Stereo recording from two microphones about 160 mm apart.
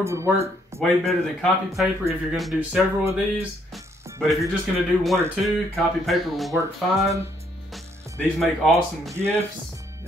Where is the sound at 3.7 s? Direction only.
Centre (ahead or behind).